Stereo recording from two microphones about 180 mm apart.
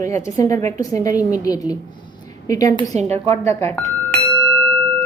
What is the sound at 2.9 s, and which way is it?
Speech, 40° right (ahead or behind).